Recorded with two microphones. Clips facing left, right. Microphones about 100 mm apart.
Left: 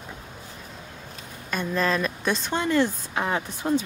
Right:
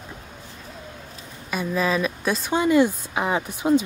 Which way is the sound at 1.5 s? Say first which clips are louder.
Right 2 dB; 5° right (ahead or behind).